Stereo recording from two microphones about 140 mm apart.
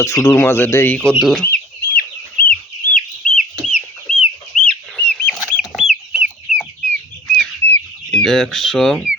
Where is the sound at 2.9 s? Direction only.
65° left (ahead or behind).